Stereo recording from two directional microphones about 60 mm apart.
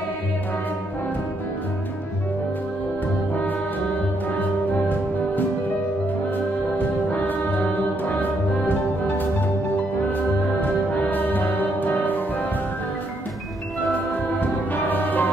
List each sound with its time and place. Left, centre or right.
4.4 s music: left
7.1 s music: left
13.9 s music: left